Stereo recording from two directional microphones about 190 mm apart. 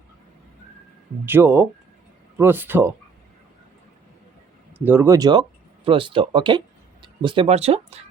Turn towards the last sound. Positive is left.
turn(degrees=-35)  # may be behind; listen again after turning